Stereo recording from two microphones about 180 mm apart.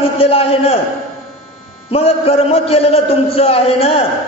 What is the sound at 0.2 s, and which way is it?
Speech, 30° left (ahead or behind).